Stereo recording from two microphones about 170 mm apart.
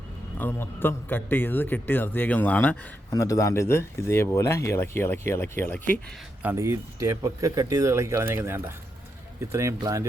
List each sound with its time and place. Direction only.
0.3 s speech: 10° left (ahead or behind)
6.4 s speech: 15° right (ahead or behind)